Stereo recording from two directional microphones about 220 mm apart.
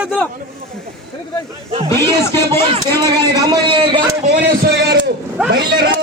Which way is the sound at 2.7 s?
20° right (ahead or behind).